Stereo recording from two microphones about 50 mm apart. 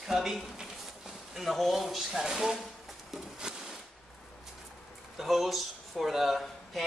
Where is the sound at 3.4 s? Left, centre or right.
Centre.